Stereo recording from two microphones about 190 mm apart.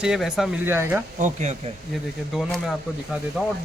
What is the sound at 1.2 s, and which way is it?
Speech, 40° right (ahead or behind).